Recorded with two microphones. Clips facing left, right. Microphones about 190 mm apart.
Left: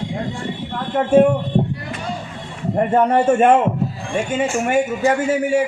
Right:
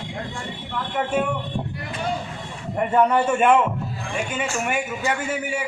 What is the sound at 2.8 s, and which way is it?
Speech, 45° left (ahead or behind).